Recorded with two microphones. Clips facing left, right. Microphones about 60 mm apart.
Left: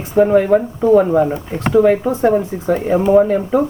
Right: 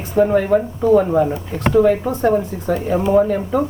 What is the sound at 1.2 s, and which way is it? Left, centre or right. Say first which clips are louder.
Speech: left 1 dB; left.